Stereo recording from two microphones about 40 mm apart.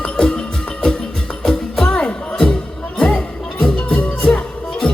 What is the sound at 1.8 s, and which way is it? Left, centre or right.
Music, left.